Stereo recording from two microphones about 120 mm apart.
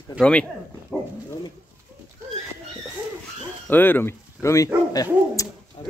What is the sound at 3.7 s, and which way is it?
Speech, 15° left (ahead or behind).